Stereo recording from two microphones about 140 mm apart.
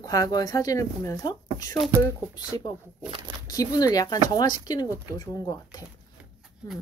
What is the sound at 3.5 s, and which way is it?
Speech, 25° left (ahead or behind).